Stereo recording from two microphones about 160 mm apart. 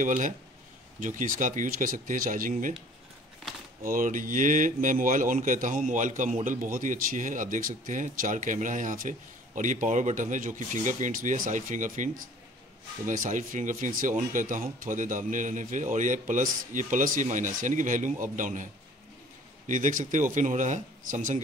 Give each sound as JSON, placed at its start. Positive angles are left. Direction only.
{"t": 0.0, "sound": "speech", "side_deg": -55}
{"t": 3.8, "sound": "speech", "side_deg": -60}